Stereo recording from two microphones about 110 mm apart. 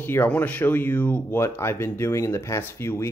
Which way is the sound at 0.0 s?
15° left (ahead or behind).